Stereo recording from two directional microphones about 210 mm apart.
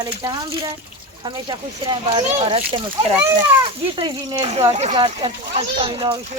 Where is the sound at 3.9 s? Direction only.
20° right (ahead or behind).